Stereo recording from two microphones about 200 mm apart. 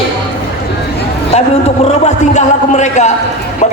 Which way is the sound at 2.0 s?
35° left (ahead or behind).